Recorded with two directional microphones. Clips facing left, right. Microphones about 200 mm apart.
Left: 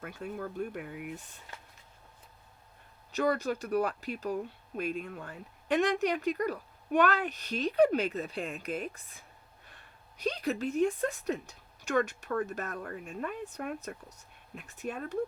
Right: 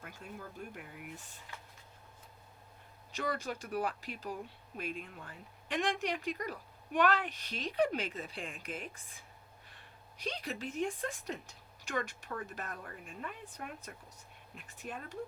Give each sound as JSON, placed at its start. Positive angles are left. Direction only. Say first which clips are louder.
{"t": 0.0, "sound": "speech", "louder": "left 9 dB", "side_deg": 60}
{"t": 3.2, "sound": "speech", "louder": "left 8 dB", "side_deg": 40}
{"t": 10.2, "sound": "speech", "louder": "left 8 dB", "side_deg": 40}
{"t": 11.9, "sound": "speech", "louder": "left 8 dB", "side_deg": 60}